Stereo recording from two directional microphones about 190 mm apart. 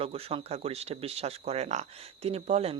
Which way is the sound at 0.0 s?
30° right (ahead or behind).